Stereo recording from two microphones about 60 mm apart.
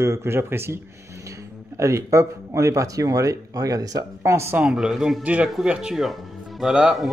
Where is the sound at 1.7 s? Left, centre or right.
Right.